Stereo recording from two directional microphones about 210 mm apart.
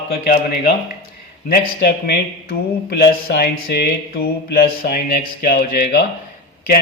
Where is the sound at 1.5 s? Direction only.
45° left (ahead or behind).